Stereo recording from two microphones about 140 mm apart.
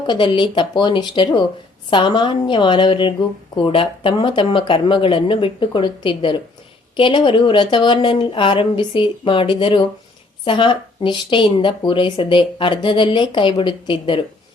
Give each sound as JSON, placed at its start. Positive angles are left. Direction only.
{"t": 0.1, "sound": "speech", "side_deg": 35}